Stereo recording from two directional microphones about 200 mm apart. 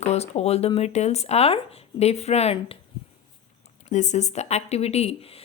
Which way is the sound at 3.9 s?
35° left (ahead or behind).